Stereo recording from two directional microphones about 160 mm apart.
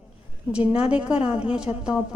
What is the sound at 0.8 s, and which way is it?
A woman's voice, 5° right (ahead or behind).